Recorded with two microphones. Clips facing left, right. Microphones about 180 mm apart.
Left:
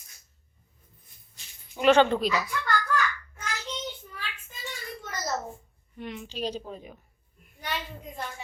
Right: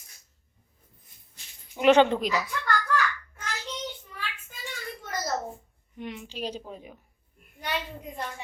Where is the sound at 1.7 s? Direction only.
15° right (ahead or behind).